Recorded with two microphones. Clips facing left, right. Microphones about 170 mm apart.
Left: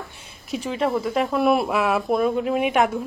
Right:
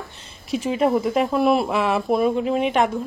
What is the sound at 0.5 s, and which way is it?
Speech, 5° right (ahead or behind).